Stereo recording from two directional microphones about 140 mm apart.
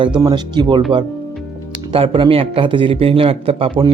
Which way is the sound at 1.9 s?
40° right (ahead or behind).